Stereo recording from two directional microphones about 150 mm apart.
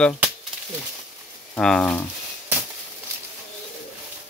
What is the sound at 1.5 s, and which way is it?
Speech, 5° left (ahead or behind).